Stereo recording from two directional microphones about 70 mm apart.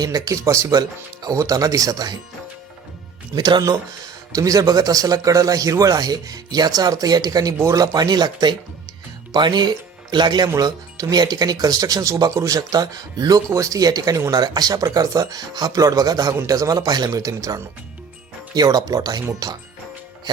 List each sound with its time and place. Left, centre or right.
0.0 s speech: right
3.3 s speech: right
4.4 s speech: right
10.6 s speech: right
13.5 s speech: right
14.4 s speech: right
17.1 s speech: right
18.5 s speech: right
20.3 s music: right